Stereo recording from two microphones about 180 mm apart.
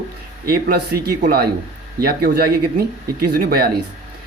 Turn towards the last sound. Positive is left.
turn(degrees=-60)  # may be behind; listen again after turning